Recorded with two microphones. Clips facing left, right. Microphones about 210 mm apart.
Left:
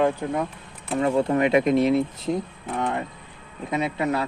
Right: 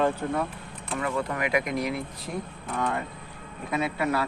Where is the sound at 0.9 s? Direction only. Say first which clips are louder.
Left 8 dB; 30° left (ahead or behind).